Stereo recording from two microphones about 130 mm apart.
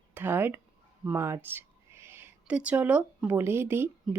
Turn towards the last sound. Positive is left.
turn(degrees=-15)  # may be behind; listen again after turning